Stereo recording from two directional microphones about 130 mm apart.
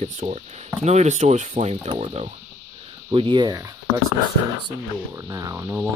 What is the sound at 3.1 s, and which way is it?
Speech, 40° right (ahead or behind).